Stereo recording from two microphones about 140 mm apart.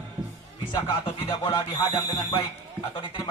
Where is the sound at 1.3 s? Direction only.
30° left (ahead or behind).